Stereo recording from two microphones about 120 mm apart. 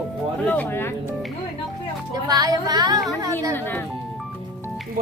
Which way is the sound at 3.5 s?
15° left (ahead or behind).